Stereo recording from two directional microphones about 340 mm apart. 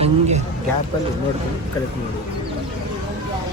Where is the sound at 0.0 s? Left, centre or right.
Centre.